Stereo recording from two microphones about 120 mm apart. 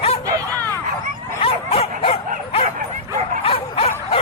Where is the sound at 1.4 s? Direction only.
55° left (ahead or behind).